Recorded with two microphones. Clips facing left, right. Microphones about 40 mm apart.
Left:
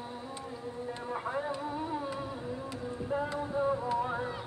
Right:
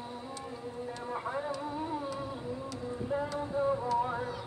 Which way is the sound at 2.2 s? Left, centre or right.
Centre.